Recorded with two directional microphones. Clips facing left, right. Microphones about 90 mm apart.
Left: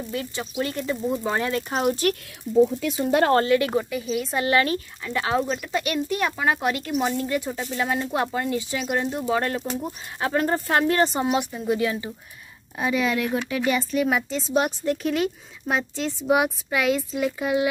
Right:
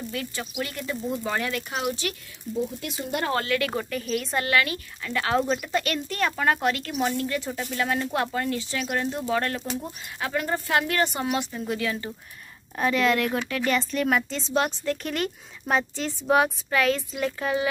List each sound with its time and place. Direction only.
0.1 s speech: 25° left (ahead or behind); by 2.1 s 40° left (ahead or behind)
3.1 s speech: 90° left
3.3 s speech: 25° left (ahead or behind)
3.7 s speech: 5° left (ahead or behind)
4.4 s speech: 25° left (ahead or behind)
5.4 s speech: centre (ahead or behind)
5.9 s speech: 15° left (ahead or behind)
6.9 s speech: 5° left (ahead or behind)
7.2 s speech: 15° left (ahead or behind)
10.2 s speech: 35° left (ahead or behind)
12.7 s speech: 10° left (ahead or behind)
16.7 s speech: 10° left (ahead or behind)